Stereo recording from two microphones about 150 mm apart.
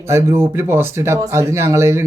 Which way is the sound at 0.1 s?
20° right (ahead or behind).